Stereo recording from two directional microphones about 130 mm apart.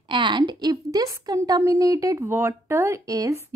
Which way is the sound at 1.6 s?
25° right (ahead or behind).